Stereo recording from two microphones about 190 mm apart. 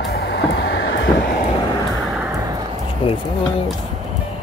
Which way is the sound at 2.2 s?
15° right (ahead or behind).